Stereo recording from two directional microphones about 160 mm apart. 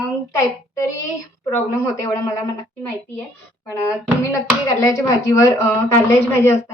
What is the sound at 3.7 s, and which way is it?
A woman's voice, 20° left (ahead or behind).